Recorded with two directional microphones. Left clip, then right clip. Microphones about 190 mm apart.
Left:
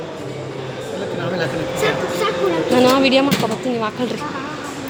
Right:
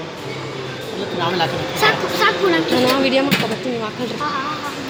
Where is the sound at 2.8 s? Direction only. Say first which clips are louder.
Left 6 dB; 15° left (ahead or behind).